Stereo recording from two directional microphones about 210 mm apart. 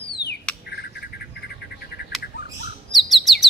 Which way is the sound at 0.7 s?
50° left (ahead or behind).